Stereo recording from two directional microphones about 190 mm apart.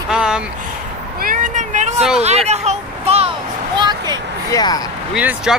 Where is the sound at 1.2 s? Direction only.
45° right (ahead or behind).